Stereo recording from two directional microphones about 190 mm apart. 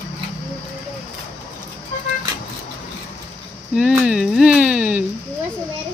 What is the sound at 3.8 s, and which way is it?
Speech, 5° right (ahead or behind).